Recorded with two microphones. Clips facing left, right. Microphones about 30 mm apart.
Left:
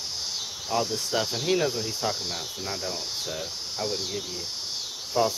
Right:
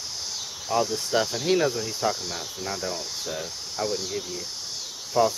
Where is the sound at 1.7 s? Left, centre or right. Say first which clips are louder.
Right 2 dB; centre.